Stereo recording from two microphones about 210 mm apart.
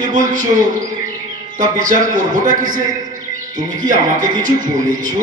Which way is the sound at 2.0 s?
40° right (ahead or behind).